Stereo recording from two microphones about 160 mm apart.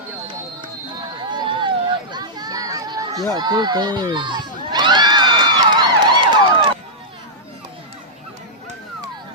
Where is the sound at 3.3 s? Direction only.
25° right (ahead or behind).